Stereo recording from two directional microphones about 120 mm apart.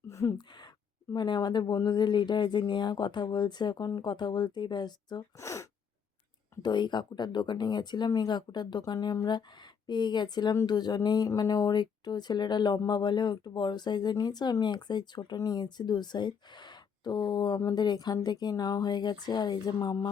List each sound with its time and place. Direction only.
0.1 s speech: 25° left (ahead or behind)
1.1 s speech: 35° left (ahead or behind)
5.4 s speech: 25° left (ahead or behind)
6.6 s speech: 35° left (ahead or behind)